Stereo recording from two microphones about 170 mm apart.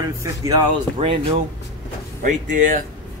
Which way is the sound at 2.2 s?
50° right (ahead or behind).